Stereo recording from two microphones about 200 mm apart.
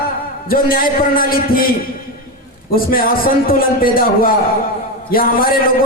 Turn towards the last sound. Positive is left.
turn(degrees=45)  # may be behind; listen again after turning